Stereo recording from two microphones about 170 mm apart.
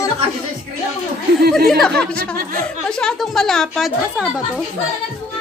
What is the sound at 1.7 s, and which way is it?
A woman's voice, 5° left (ahead or behind).